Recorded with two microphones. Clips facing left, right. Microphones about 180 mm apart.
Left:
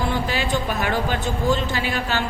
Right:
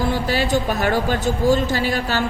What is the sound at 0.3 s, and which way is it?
A woman's voice, 40° right (ahead or behind).